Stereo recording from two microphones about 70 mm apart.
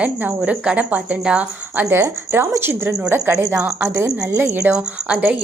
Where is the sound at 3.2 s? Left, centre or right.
Right.